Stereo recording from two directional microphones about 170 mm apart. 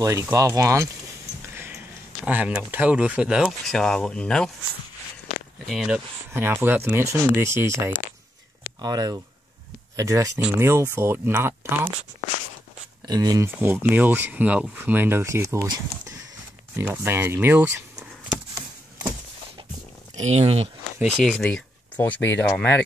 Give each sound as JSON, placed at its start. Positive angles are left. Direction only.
{"t": 0.0, "sound": "speech", "side_deg": -20}
{"t": 1.5, "sound": "a sound", "side_deg": -15}
{"t": 2.2, "sound": "speech", "side_deg": -5}
{"t": 5.7, "sound": "speech", "side_deg": 0}
{"t": 6.3, "sound": "speech", "side_deg": -15}
{"t": 13.0, "sound": "speech", "side_deg": -25}
{"t": 20.2, "sound": "speech", "side_deg": -40}
{"t": 21.0, "sound": "speech", "side_deg": 0}